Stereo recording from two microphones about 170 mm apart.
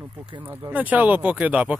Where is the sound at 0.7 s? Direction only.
10° right (ahead or behind).